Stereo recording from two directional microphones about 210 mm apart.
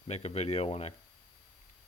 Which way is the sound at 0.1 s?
30° left (ahead or behind).